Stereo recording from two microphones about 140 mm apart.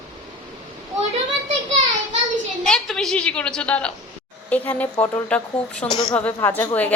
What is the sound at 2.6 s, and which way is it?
A woman's voice, centre (ahead or behind).